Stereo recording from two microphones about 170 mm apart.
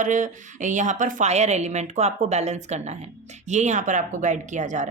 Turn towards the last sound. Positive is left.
turn(degrees=-45)  # may be behind; listen again after turning